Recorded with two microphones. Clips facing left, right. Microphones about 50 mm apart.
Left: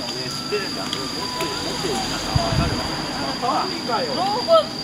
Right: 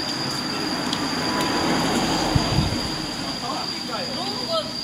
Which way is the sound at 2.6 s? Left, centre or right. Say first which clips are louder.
Left 2 dB; left.